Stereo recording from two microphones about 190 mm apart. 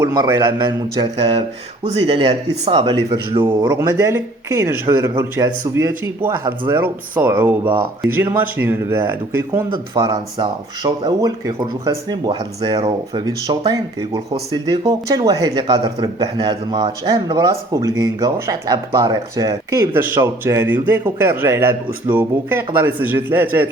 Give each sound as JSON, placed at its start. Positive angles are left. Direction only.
{"t": 0.1, "sound": "speech", "side_deg": -20}
{"t": 3.7, "sound": "speech", "side_deg": -15}
{"t": 9.6, "sound": "speech", "side_deg": -25}